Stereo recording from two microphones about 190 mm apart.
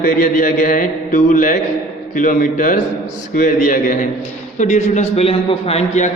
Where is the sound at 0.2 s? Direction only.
45° left (ahead or behind).